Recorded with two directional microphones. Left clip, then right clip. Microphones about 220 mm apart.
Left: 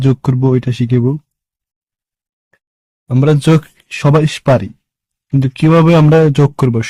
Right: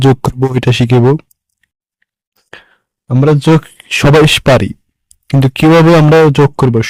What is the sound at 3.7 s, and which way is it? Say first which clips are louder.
Speech: right 6 dB; 35° right (ahead or behind).